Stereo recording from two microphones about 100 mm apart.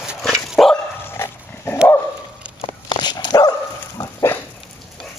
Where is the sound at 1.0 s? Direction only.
25° left (ahead or behind).